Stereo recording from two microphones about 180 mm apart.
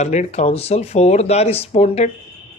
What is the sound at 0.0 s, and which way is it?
Speech, 40° left (ahead or behind).